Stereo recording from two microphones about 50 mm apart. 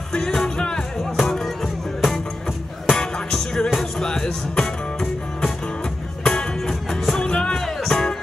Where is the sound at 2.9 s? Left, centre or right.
Centre.